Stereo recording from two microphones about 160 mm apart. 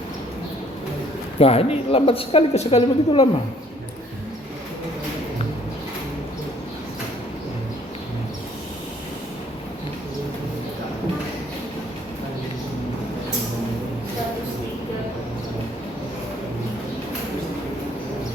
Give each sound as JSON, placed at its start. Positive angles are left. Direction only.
{"t": 1.4, "sound": "a woman's voice", "side_deg": 40}